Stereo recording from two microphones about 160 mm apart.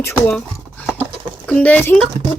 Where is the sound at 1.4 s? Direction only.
10° left (ahead or behind).